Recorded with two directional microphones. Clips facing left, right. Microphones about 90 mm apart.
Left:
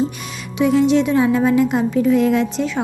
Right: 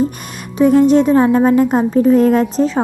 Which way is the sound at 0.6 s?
45° right (ahead or behind).